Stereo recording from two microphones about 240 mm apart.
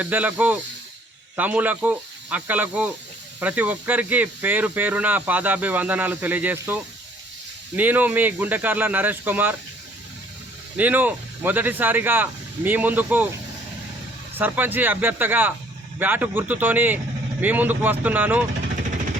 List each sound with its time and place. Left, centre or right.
0.0 s speech: centre
10.8 s speech: centre
14.3 s speech: centre